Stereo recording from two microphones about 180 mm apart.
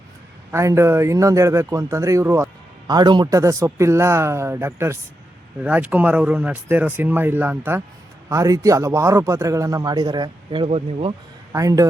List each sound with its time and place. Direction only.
0.5 s a man's voice: 15° right (ahead or behind); by 11.1 s 35° right (ahead or behind)
11.5 s a man's voice: 20° right (ahead or behind)